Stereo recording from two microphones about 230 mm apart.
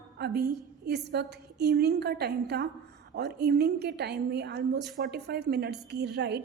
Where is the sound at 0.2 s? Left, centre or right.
Right.